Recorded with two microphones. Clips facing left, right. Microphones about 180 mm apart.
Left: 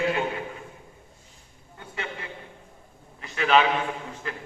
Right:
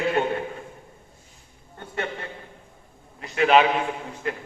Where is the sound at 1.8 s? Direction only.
45° right (ahead or behind).